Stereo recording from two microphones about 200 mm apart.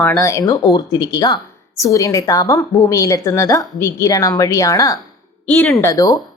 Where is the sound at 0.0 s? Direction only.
10° left (ahead or behind).